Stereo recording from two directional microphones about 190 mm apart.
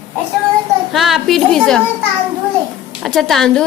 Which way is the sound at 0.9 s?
Centre (ahead or behind).